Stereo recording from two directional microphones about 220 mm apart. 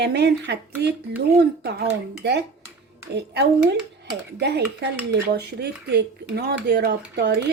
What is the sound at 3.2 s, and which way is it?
Speech, 50° right (ahead or behind).